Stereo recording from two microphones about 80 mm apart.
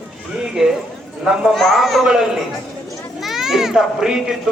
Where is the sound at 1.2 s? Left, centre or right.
Centre.